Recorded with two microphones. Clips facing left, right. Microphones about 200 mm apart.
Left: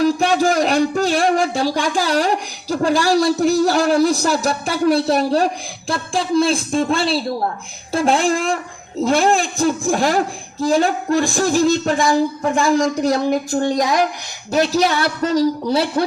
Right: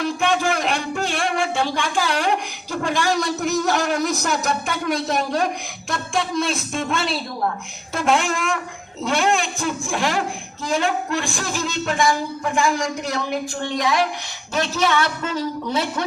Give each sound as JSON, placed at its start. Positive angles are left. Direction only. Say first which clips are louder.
{"t": 0.0, "sound": "a man's voice", "louder": "left 5 dB", "side_deg": 35}